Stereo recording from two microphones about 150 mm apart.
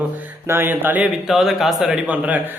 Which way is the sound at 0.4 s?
15° right (ahead or behind).